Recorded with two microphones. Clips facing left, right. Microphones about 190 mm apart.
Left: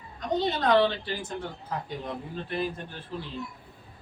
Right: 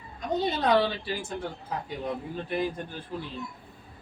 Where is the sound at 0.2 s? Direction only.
10° right (ahead or behind).